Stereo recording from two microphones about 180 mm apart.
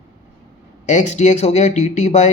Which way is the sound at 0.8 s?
40° left (ahead or behind).